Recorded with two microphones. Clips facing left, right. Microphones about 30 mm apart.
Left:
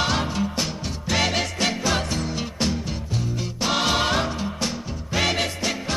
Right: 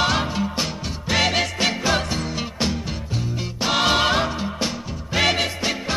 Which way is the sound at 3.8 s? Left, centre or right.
Centre.